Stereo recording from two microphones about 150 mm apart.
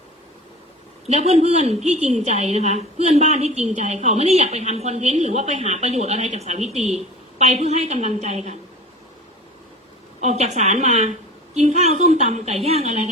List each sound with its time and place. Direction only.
1.0 s a woman's voice: 45° right (ahead or behind)
10.2 s a woman's voice: 50° right (ahead or behind)